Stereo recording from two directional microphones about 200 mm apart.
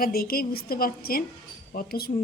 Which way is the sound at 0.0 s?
50° left (ahead or behind).